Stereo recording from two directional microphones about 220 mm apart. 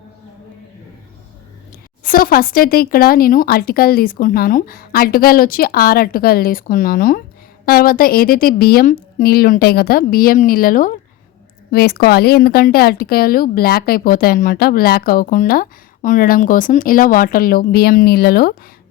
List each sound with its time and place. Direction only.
2.0 s a woman's voice: 40° left (ahead or behind)